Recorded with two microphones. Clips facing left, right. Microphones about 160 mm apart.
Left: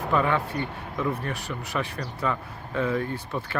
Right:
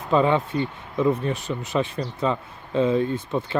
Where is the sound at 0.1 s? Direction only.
20° right (ahead or behind).